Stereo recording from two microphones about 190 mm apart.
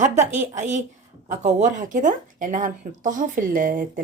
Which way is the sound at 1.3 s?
40° right (ahead or behind).